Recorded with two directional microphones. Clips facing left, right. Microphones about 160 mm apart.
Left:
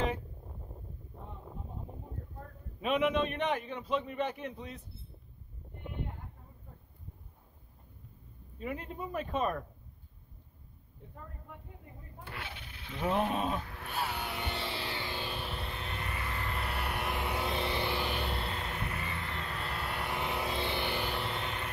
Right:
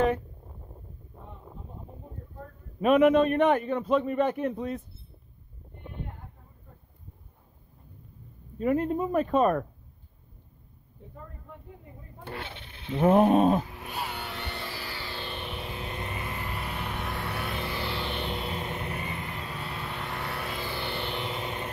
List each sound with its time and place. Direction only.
2.8 s a man's voice: 50° right (ahead or behind)
8.5 s a man's voice: 50° right (ahead or behind)
12.3 s a sound: 30° right (ahead or behind)
12.9 s a man's voice: 50° right (ahead or behind)
13.8 s a sound: centre (ahead or behind)
14.4 s vehicle: 20° left (ahead or behind); by 15.8 s centre (ahead or behind)
15.8 s vehicle: 20° right (ahead or behind)
16.5 s vehicle: centre (ahead or behind)
17.1 s music: 15° left (ahead or behind)
18.5 s vehicle: 20° right (ahead or behind); by 20.2 s centre (ahead or behind)
20.2 s vehicle: 15° left (ahead or behind)
21.4 s vehicle: 20° right (ahead or behind)